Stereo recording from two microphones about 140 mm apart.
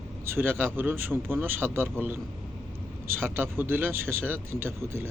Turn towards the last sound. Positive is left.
turn(degrees=-20)  # may be behind; listen again after turning